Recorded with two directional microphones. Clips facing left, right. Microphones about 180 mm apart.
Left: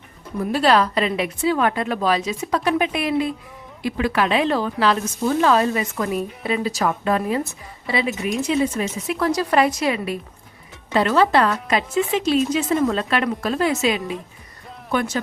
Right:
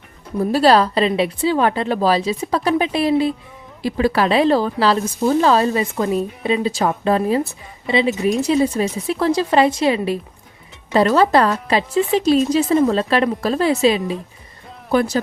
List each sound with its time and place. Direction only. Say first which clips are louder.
0.3 s speech: right 4 dB; 35° right (ahead or behind)